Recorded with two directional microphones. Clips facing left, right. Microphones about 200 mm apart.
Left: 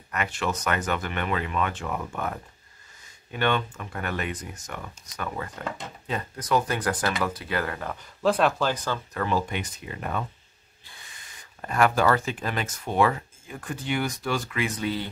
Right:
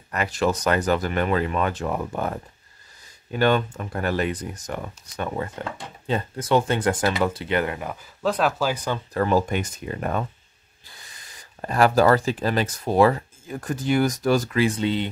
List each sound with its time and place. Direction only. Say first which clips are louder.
0.1 s speech: right 6 dB; 35° right (ahead or behind); by 7.9 s 20° right (ahead or behind)
7.9 s speech: left 1 dB; 5° right (ahead or behind)
9.1 s speech: right 7 dB; 40° right (ahead or behind); by 15.0 s 25° right (ahead or behind)